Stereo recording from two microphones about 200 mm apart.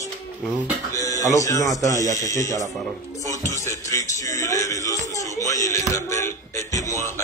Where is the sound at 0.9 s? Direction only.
15° left (ahead or behind).